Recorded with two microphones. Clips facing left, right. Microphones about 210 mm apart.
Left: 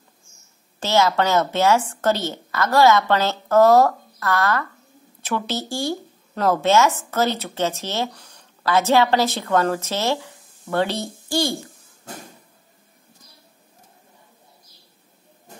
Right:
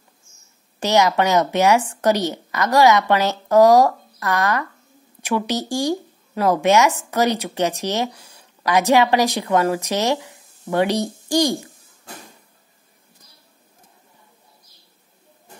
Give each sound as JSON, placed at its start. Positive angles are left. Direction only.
{"t": 0.7, "sound": "speech", "side_deg": -15}